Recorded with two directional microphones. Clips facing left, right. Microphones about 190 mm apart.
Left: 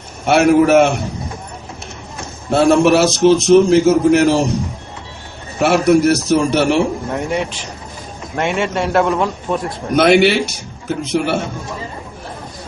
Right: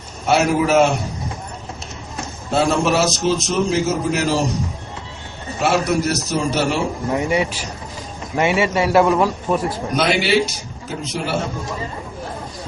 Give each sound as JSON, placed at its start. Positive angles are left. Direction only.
{"t": 0.3, "sound": "a man's voice", "side_deg": 55}
{"t": 2.5, "sound": "a man's voice", "side_deg": 60}
{"t": 5.5, "sound": "a man's voice", "side_deg": 60}
{"t": 7.1, "sound": "a man's voice", "side_deg": -5}
{"t": 9.9, "sound": "a man's voice", "side_deg": 55}